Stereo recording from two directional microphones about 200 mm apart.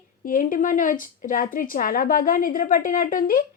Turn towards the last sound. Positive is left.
turn(degrees=45)  # may be behind; listen again after turning